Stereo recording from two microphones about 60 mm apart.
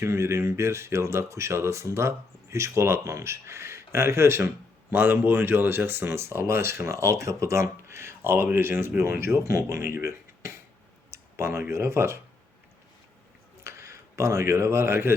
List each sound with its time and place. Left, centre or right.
0.0 s speech: right
11.1 s a sound: right
11.7 s speech: right
13.7 s speech: right